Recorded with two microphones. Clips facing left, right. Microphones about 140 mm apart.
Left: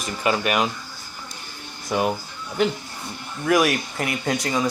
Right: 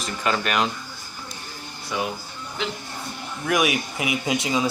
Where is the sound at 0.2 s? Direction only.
10° left (ahead or behind).